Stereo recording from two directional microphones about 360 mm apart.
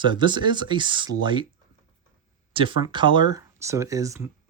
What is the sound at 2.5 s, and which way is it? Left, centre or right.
Speech, centre.